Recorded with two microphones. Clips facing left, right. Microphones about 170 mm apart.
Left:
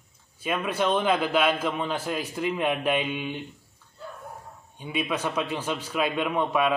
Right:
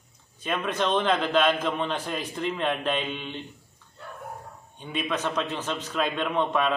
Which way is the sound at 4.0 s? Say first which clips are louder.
Left 2 dB; 65° right (ahead or behind).